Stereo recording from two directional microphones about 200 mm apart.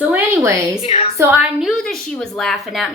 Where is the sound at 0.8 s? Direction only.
30° left (ahead or behind).